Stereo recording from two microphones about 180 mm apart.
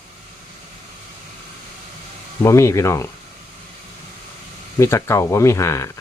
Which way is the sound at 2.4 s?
15° left (ahead or behind).